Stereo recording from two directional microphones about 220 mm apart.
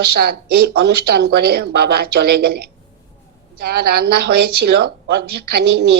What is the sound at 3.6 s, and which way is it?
A woman's voice, 45° right (ahead or behind).